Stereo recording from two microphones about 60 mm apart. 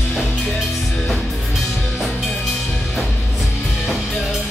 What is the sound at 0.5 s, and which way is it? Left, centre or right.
Music, centre.